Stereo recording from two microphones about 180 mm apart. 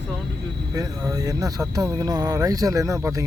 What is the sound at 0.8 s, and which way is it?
Speech, 20° right (ahead or behind).